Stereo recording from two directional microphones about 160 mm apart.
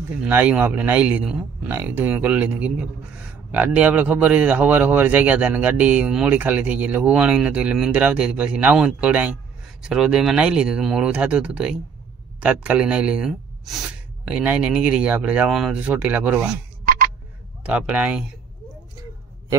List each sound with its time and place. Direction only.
0.2 s a man's voice: 10° right (ahead or behind)
17.6 s a man's voice: 10° right (ahead or behind)